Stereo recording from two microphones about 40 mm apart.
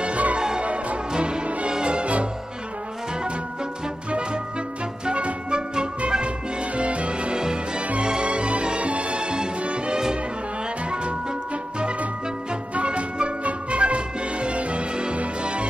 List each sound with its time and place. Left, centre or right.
0.0 s music: right
5.0 s music: right
7.8 s music: right
12.7 s music: right